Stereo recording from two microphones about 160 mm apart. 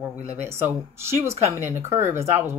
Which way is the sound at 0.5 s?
15° right (ahead or behind).